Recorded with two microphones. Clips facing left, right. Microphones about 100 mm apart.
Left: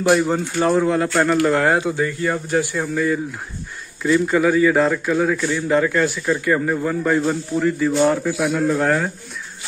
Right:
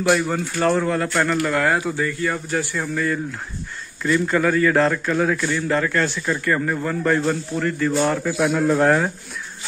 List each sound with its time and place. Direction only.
0.1 s a man's voice: 20° left (ahead or behind); by 5.5 s centre (ahead or behind)
5.5 s a man's voice: 15° left (ahead or behind)
8.4 s a man's voice: centre (ahead or behind)